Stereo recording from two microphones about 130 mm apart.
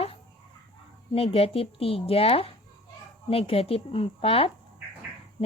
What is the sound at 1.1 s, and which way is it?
A woman's voice, 45° left (ahead or behind).